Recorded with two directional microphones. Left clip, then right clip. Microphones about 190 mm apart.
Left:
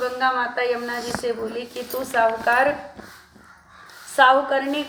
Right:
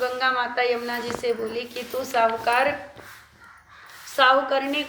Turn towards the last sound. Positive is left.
turn(degrees=20)  # may be behind; listen again after turning